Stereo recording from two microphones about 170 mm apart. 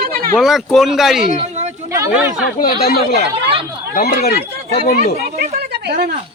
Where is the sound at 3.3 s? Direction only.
30° right (ahead or behind).